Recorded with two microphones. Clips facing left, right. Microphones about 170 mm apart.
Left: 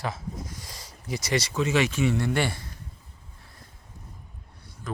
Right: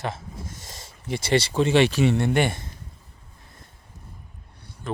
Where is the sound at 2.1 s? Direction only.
20° right (ahead or behind).